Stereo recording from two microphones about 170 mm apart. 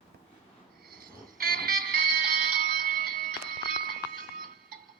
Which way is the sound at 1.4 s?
60° right (ahead or behind).